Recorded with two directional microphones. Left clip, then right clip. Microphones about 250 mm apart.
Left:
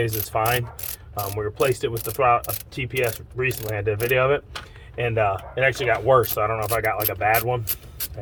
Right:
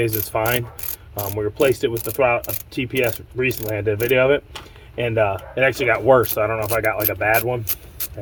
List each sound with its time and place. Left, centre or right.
0.0 s speech: right